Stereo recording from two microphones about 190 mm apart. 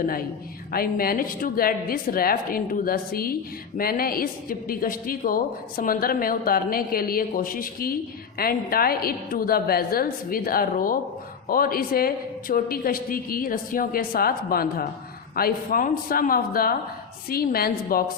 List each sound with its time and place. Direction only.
0.7 s a woman's voice: 50° left (ahead or behind)